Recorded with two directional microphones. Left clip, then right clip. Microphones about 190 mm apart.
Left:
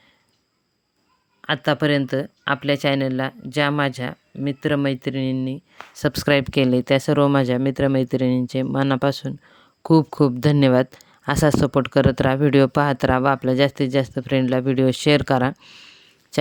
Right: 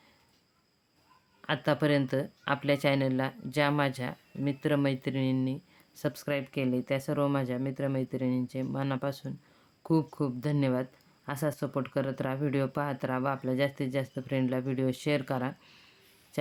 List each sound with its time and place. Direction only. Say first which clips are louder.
1.4 s speech: left 8 dB; 30° left (ahead or behind)